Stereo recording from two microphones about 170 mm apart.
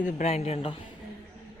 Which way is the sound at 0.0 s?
40° left (ahead or behind).